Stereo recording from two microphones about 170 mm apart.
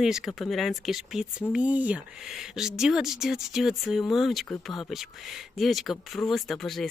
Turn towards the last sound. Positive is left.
turn(degrees=0)  # may be behind; listen again after turning